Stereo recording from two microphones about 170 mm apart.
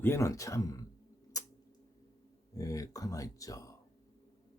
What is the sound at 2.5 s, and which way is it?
Speech, 20° left (ahead or behind).